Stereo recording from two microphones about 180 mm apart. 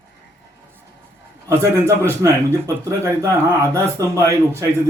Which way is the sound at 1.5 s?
15° right (ahead or behind).